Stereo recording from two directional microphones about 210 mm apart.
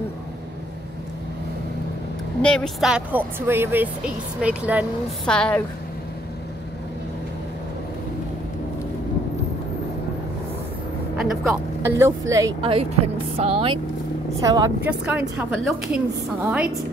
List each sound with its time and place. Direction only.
2.4 s speech: 5° left (ahead or behind)
5.2 s a woman's voice: 5° left (ahead or behind)
11.1 s speech: 10° right (ahead or behind)
12.7 s speech: 30° right (ahead or behind)
14.4 s speech: 15° right (ahead or behind)
14.9 s a woman's voice: 5° right (ahead or behind)